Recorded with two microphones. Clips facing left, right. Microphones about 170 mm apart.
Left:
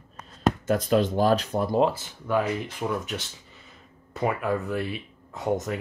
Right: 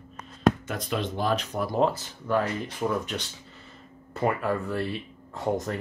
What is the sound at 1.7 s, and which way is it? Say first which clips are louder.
Speech: left 1 dB; 15° left (ahead or behind).